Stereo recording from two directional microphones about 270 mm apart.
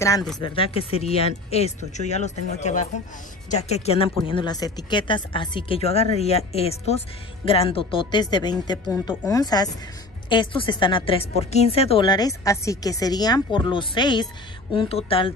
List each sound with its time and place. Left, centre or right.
0.0 s a woman's voice: centre
0.4 s a woman's voice: left